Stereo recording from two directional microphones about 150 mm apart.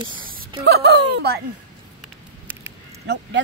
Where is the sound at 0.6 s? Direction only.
90° right.